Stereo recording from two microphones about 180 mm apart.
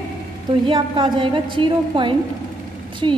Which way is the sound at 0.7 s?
25° right (ahead or behind).